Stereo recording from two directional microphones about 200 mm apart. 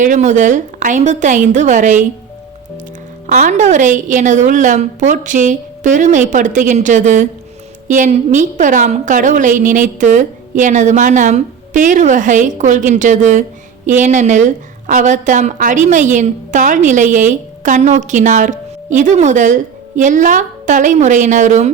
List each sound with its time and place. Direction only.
0.0 s a woman's voice: 40° right (ahead or behind)
3.2 s a woman's voice: 40° right (ahead or behind)